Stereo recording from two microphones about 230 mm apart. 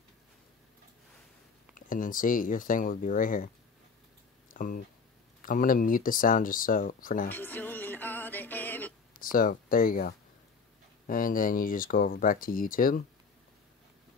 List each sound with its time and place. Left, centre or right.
1.8 s speech: left
4.6 s speech: left
7.2 s music: centre
9.1 s speech: left